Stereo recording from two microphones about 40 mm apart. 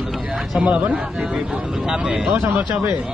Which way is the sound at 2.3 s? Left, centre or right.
Right.